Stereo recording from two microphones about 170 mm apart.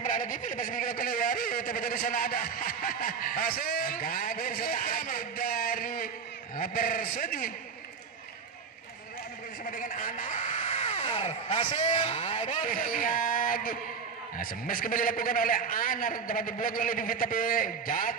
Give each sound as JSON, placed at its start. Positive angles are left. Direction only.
{"t": 0.0, "sound": "a sound", "side_deg": 50}
{"t": 6.5, "sound": "a man's voice", "side_deg": 55}
{"t": 9.7, "sound": "a man's voice", "side_deg": 50}